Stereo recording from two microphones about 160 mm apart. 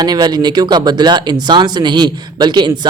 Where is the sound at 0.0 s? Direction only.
25° right (ahead or behind).